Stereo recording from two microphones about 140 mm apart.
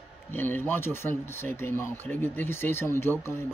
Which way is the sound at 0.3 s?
15° left (ahead or behind).